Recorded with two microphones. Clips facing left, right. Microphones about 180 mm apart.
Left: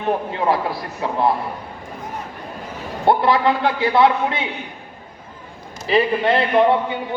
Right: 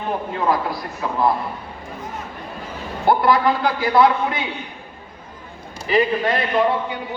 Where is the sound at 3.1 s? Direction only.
25° left (ahead or behind).